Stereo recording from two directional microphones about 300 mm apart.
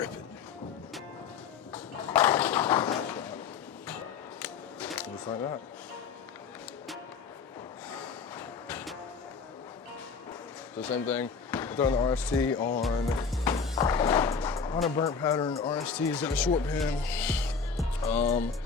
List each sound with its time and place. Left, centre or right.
1.7 s a sound: centre
4.4 s music: centre
7.9 s vehicle: centre
10.8 s speech: centre
13.3 s music: centre
14.9 s speech: centre
15.7 s speech: centre